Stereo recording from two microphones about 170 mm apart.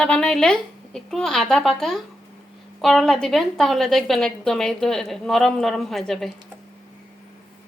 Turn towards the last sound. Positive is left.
turn(degrees=0)  # may be behind; listen again after turning